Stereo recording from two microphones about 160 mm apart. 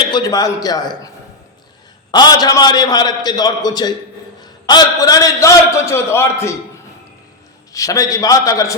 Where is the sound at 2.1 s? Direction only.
25° left (ahead or behind).